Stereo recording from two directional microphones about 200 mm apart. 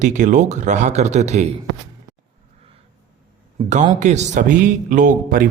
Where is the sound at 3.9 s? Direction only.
35° right (ahead or behind).